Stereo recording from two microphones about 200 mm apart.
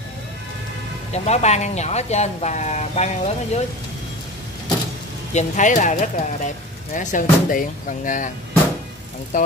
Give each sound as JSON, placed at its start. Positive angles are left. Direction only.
{"t": 1.1, "sound": "speech", "side_deg": 35}
{"t": 5.3, "sound": "speech", "side_deg": 35}
{"t": 9.3, "sound": "speech", "side_deg": 40}